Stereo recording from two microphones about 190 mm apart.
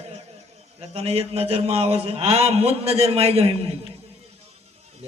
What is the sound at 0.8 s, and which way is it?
Speech, 35° right (ahead or behind).